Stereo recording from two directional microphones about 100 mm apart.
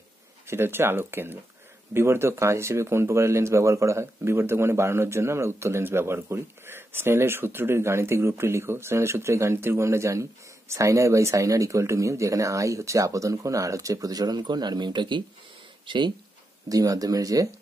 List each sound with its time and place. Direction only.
0.5 s speech: 25° right (ahead or behind); by 16.0 s 55° right (ahead or behind)
16.6 s speech: 35° right (ahead or behind)